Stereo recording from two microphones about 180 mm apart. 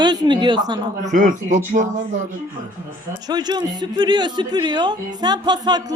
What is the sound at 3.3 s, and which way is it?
Speech, 25° right (ahead or behind).